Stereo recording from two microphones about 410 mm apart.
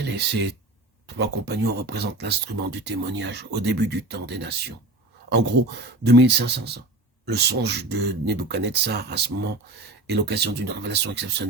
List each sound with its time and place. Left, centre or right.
0.0 s speech: right